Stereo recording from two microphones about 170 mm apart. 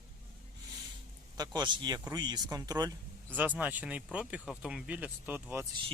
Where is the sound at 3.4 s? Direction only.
10° right (ahead or behind).